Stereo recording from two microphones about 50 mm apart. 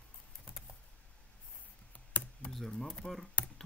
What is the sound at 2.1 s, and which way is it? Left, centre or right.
Computer keyboard, left.